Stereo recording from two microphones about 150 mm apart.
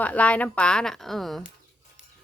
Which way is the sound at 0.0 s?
10° left (ahead or behind).